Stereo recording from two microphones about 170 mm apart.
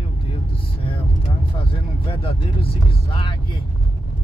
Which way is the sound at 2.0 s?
35° left (ahead or behind).